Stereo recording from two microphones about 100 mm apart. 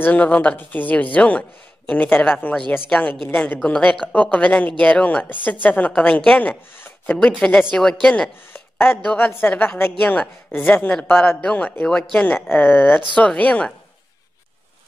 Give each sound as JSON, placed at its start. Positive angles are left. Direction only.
{"t": 0.0, "sound": "a woman's voice", "side_deg": 15}
{"t": 6.8, "sound": "a sound", "side_deg": 15}
{"t": 7.3, "sound": "a woman's voice", "side_deg": 5}
{"t": 8.9, "sound": "a woman's voice", "side_deg": 20}
{"t": 12.4, "sound": "a woman's voice", "side_deg": 20}